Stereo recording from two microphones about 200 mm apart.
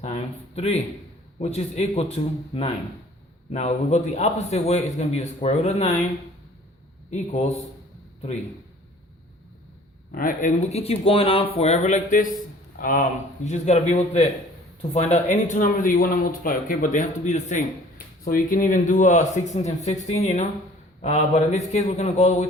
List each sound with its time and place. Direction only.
0.0 s speech: 30° left (ahead or behind)
7.1 s speech: 35° left (ahead or behind)
10.1 s speech: 45° left (ahead or behind)